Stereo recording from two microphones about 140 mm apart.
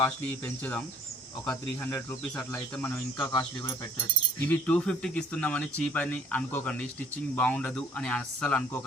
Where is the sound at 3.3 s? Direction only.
30° left (ahead or behind).